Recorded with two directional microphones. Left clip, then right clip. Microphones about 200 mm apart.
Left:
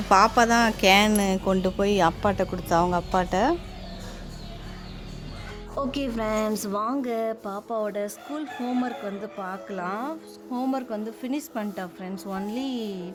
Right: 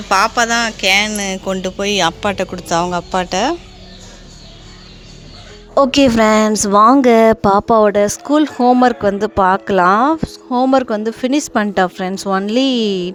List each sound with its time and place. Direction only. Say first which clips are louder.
0.1 s speech: right 5 dB; 5° left (ahead or behind)
1.5 s speech: right 8 dB; 10° right (ahead or behind)
5.7 s a woman's voice: right 18 dB; 50° right (ahead or behind)